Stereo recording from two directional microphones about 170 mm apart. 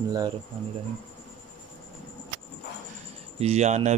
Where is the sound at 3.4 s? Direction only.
40° right (ahead or behind).